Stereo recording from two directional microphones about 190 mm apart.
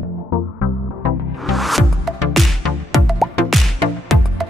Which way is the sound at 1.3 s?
Centre (ahead or behind).